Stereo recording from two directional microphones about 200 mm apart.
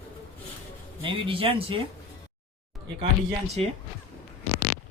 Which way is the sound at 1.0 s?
25° right (ahead or behind).